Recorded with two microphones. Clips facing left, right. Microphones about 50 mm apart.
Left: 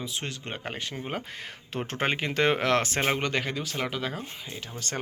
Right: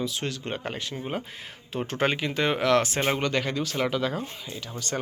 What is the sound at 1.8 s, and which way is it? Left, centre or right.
Speech, left.